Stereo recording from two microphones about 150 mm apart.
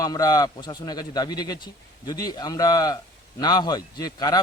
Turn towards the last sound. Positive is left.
turn(degrees=25)  # may be behind; listen again after turning